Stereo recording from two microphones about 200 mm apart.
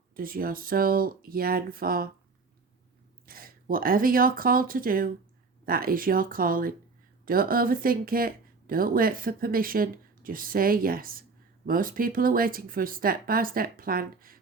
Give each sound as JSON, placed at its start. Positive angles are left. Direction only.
{"t": 0.2, "sound": "speech", "side_deg": -45}
{"t": 3.2, "sound": "speech", "side_deg": -45}